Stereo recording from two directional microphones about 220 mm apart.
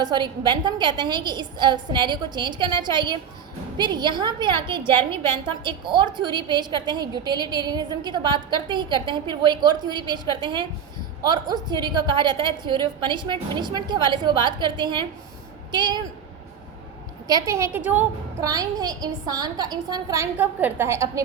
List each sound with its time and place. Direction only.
0.0 s a woman's voice: 20° right (ahead or behind)
17.2 s a woman's voice: 15° right (ahead or behind)